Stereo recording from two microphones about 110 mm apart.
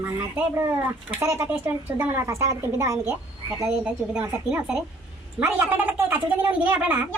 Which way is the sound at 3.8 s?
10° right (ahead or behind).